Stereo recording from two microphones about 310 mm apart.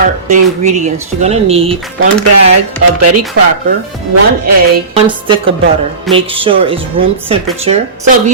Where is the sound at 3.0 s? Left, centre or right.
Right.